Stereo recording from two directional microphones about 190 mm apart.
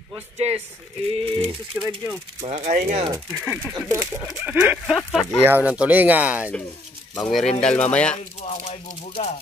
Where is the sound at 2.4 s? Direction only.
35° right (ahead or behind).